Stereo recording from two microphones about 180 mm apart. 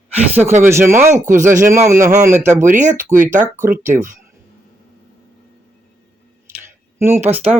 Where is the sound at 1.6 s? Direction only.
15° right (ahead or behind).